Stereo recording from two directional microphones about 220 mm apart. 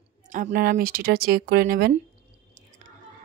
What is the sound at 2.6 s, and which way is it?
Chewing, 35° right (ahead or behind).